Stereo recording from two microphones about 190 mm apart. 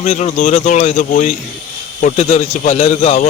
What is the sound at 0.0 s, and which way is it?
Speech, 40° left (ahead or behind).